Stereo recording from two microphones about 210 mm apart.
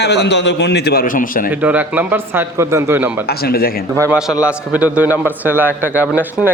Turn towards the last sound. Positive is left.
turn(degrees=-10)  # may be behind; listen again after turning